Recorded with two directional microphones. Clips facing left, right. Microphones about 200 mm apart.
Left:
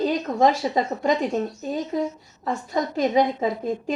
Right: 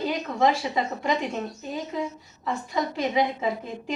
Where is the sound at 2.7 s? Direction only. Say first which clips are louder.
Left 5 dB; 45° left (ahead or behind).